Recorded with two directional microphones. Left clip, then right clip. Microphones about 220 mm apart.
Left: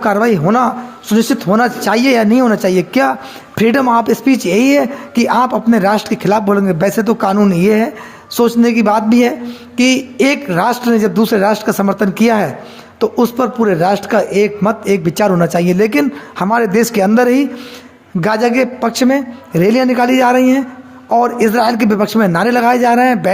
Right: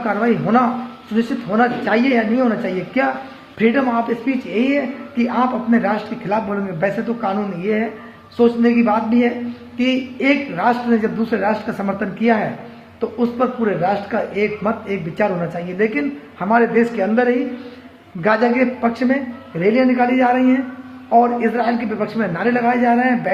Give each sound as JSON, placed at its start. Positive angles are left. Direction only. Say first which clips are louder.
{"t": 0.0, "sound": "a man's voice", "louder": "left 6 dB", "side_deg": 45}